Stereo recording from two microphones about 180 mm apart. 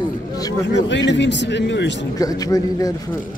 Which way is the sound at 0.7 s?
80° left.